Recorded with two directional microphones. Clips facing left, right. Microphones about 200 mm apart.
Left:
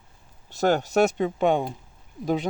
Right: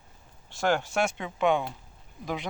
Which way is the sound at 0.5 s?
40° left (ahead or behind).